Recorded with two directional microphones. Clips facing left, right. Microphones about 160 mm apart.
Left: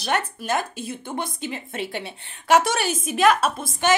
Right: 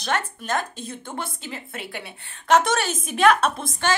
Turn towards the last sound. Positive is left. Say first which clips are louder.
# even
turn(degrees=5)  # may be behind; listen again after turning